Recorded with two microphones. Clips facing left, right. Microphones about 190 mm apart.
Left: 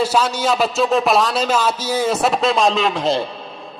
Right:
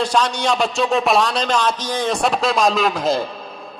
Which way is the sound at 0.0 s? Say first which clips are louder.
Left 1 dB; 5° left (ahead or behind).